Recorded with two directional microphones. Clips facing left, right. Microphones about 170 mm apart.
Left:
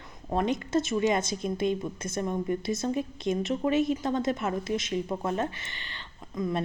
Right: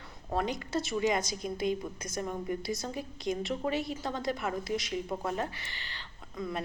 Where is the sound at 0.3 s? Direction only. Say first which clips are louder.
Left 5 dB; 20° left (ahead or behind).